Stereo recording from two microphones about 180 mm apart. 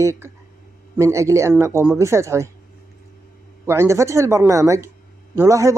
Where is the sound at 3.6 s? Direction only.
15° right (ahead or behind).